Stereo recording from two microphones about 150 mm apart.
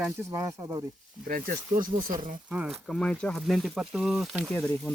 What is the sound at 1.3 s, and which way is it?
Speech, 70° right (ahead or behind).